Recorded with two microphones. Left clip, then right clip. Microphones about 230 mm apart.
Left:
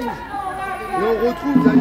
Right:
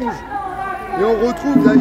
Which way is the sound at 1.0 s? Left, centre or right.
Right.